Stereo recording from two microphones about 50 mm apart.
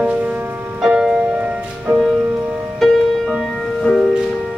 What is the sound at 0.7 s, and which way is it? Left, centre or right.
Music, centre.